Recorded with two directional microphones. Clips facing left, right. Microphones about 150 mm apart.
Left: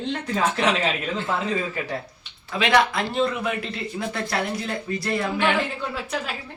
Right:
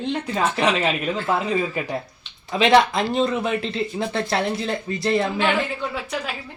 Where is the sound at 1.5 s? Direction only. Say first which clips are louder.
Right 3 dB; 15° right (ahead or behind).